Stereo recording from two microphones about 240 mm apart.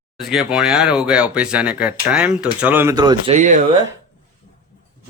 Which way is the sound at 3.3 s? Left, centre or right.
Right.